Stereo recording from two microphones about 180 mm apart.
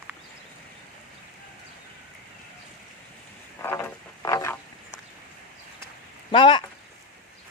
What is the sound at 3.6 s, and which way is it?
Frog, 10° left (ahead or behind).